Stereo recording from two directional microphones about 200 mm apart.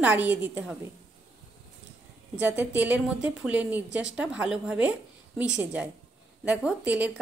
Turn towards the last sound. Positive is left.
turn(degrees=-5)  # may be behind; listen again after turning